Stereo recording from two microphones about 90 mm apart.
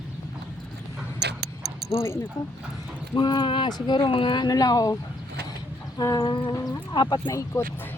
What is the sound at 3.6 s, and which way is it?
Speech, 55° left (ahead or behind).